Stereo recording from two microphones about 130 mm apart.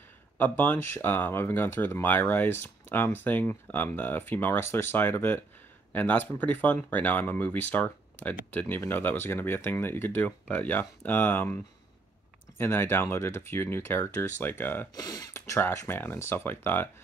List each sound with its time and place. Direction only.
0.4 s speech: 15° left (ahead or behind)
15.0 s speech: 30° left (ahead or behind)